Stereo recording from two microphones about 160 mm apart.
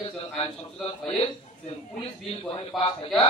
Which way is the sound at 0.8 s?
35° left (ahead or behind).